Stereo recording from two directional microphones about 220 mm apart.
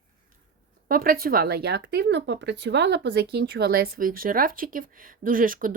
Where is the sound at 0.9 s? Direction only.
40° right (ahead or behind).